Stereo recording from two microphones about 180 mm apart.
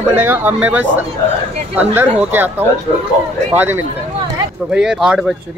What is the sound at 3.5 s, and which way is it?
Speech, 10° right (ahead or behind).